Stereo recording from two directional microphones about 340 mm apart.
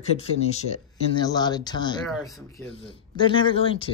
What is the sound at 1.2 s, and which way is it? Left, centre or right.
Speech, centre.